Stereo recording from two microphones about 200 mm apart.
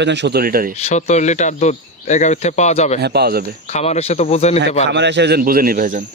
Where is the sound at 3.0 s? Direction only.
55° right (ahead or behind).